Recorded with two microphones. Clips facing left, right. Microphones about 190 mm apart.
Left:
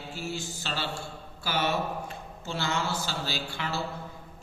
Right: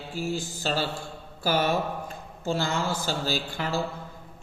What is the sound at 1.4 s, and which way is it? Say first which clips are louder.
Mantra: right 4 dB; 45° right (ahead or behind).